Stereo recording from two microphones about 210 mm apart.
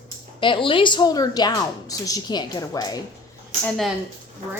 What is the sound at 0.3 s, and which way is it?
A woman's voice, 25° left (ahead or behind).